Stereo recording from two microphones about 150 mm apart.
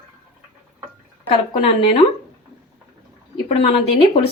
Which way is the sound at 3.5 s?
35° left (ahead or behind).